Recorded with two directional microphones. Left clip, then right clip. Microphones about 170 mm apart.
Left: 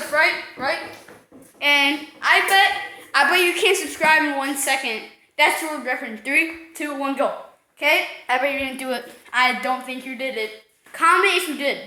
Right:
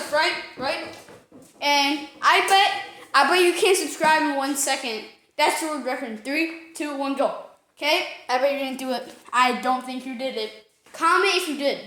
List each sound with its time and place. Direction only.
0.1 s a woman's voice: 5° right (ahead or behind)
0.6 s speech: 10° left (ahead or behind)
1.5 s a child's voice: 15° right (ahead or behind)
2.2 s a woman's voice: 35° right (ahead or behind); by 4.9 s 15° right (ahead or behind)
5.4 s a woman's voice: 25° right (ahead or behind)
6.2 s a woman's voice: 10° right (ahead or behind)
8.4 s speech: 15° right (ahead or behind)
9.0 s a woman's voice: 25° right (ahead or behind)
9.6 s speech: 15° right (ahead or behind)